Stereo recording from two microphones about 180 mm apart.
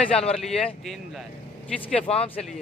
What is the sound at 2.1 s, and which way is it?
Speech, 35° left (ahead or behind).